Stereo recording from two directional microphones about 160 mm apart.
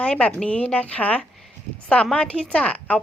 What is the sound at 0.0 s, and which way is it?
A woman's voice, 5° left (ahead or behind).